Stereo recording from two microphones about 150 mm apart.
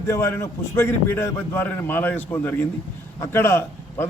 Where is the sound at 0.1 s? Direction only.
15° left (ahead or behind).